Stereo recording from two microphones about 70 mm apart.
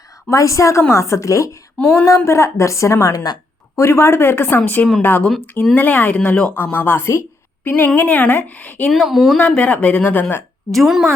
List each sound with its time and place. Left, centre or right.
0.3 s a woman's voice: left
1.8 s speech: left
2.0 s a woman's voice: left
3.8 s speech: left
6.1 s speech: centre
6.6 s a woman's voice: left
7.7 s speech: left
8.9 s speech: centre
9.4 s speech: centre
10.7 s speech: centre